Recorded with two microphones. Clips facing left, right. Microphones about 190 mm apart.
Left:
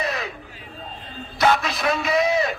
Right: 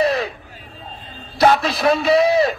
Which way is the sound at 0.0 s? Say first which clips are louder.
Right 9 dB; 35° right (ahead or behind).